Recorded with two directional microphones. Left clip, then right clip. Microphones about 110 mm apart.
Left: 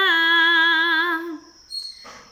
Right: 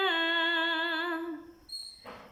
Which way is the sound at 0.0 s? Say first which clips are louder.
Left 11 dB; 25° right (ahead or behind).